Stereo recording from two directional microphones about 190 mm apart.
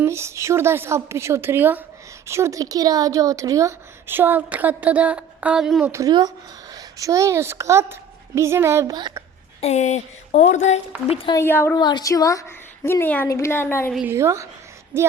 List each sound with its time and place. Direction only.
0.0 s a woman's voice: 15° right (ahead or behind)
5.9 s a woman's voice: 20° right (ahead or behind)
9.6 s speech: 35° left (ahead or behind)
11.2 s a woman's voice: 20° left (ahead or behind)
11.4 s a woman's voice: 10° left (ahead or behind)
13.9 s a woman's voice: 10° right (ahead or behind)